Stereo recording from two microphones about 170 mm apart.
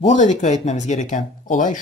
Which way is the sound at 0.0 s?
45° left (ahead or behind).